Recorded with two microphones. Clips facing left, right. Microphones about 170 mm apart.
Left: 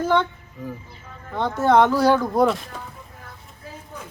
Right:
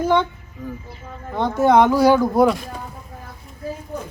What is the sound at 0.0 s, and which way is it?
Speech, 15° right (ahead or behind).